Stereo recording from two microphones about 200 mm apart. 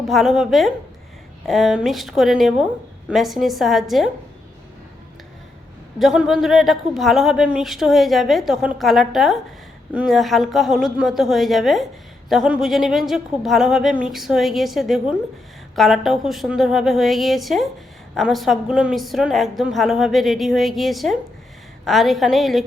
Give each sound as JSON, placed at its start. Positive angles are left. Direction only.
{"t": 0.1, "sound": "a woman's voice", "side_deg": 0}
{"t": 6.0, "sound": "a woman's voice", "side_deg": 0}